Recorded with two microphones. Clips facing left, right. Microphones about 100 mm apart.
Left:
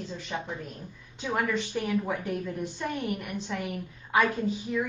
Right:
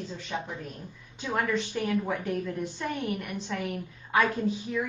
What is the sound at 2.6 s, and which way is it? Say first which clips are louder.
Speech: even; 10° left (ahead or behind).